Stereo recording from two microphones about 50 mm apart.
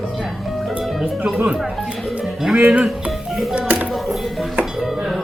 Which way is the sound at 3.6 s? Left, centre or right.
Right.